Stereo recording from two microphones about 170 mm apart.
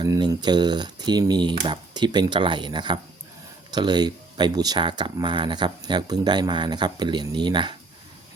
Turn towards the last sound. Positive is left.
turn(degrees=-30)  # may be behind; listen again after turning